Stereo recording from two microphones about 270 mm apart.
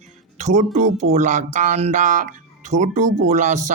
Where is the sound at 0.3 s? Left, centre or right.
Right.